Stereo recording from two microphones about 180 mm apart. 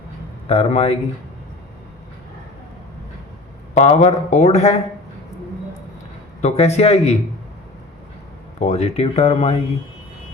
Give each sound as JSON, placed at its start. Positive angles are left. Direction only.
{"t": 0.4, "sound": "speech", "side_deg": 35}
{"t": 3.8, "sound": "speech", "side_deg": 40}
{"t": 6.4, "sound": "speech", "side_deg": 35}
{"t": 8.5, "sound": "speech", "side_deg": 35}